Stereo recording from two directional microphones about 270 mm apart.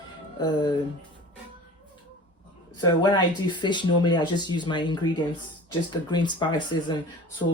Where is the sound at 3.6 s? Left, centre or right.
Centre.